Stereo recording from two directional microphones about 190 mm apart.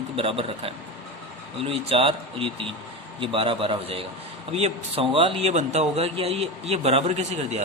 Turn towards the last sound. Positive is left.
turn(degrees=-35)  # may be behind; listen again after turning